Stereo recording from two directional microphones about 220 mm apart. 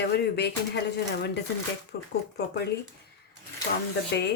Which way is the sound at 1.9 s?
45° left (ahead or behind).